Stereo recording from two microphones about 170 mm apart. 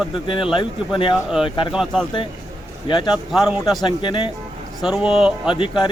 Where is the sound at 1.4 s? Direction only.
30° left (ahead or behind).